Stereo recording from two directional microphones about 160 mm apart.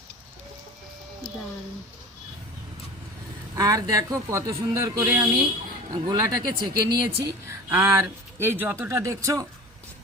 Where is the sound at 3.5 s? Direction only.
20° right (ahead or behind).